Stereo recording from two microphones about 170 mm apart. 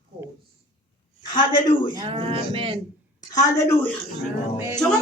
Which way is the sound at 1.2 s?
25° left (ahead or behind).